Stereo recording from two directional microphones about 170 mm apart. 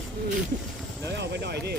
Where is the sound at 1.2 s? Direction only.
80° right.